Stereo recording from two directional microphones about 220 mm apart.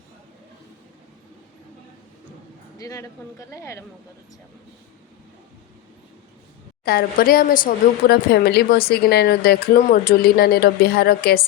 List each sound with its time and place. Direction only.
2.7 s speech: 15° left (ahead or behind)
6.8 s a woman's voice: 45° left (ahead or behind)